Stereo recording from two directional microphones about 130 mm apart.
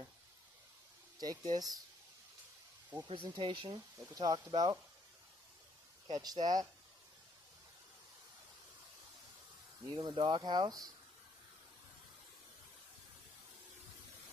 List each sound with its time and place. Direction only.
1.2 s speech: 30° right (ahead or behind)
3.1 s speech: 40° right (ahead or behind)
6.1 s speech: 30° right (ahead or behind)
9.8 s speech: 35° right (ahead or behind)